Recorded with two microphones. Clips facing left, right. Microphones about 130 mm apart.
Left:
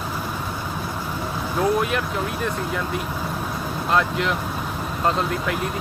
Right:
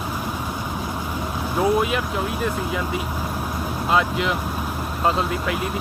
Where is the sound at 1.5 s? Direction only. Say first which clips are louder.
Right 1 dB; 5° right (ahead or behind).